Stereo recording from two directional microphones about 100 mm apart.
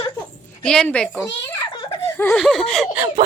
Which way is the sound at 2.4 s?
5° left (ahead or behind).